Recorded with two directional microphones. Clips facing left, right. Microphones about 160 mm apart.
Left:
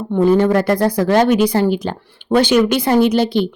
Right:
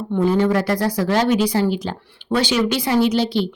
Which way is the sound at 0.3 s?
50° left (ahead or behind).